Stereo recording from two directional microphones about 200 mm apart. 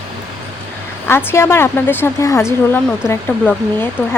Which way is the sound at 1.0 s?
10° left (ahead or behind).